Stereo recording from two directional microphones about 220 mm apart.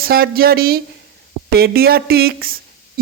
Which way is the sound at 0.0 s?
45° right (ahead or behind).